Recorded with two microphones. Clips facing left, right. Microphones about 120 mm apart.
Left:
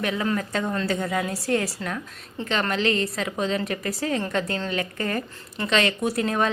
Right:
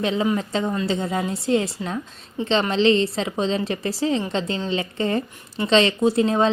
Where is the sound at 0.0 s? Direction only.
25° right (ahead or behind).